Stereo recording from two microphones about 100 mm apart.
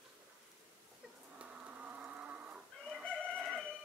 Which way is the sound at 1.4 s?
10° right (ahead or behind).